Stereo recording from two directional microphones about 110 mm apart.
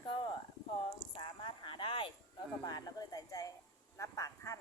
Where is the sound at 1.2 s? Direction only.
50° left (ahead or behind).